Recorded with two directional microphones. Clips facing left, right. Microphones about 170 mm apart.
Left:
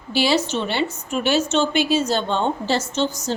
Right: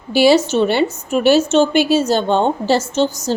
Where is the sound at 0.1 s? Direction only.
45° right (ahead or behind).